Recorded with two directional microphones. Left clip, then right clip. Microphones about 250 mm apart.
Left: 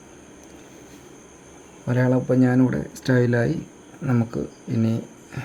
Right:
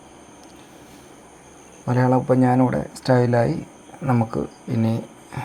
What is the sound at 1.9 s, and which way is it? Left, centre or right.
Speech, centre.